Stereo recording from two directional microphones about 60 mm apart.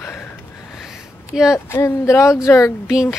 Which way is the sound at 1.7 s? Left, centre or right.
Left.